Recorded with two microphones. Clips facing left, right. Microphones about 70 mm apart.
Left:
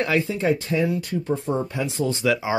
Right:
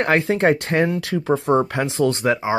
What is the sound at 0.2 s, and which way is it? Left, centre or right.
Speech, right.